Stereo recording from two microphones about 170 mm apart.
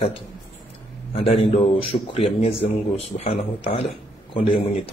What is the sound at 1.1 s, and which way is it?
Speech, 35° left (ahead or behind).